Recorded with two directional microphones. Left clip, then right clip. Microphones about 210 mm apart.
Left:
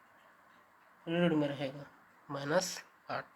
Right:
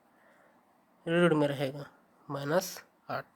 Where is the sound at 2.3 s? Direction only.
30° right (ahead or behind).